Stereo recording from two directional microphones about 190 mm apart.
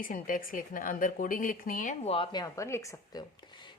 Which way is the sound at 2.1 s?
20° left (ahead or behind).